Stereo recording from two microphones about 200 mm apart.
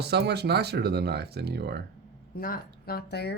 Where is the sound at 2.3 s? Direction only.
45° left (ahead or behind).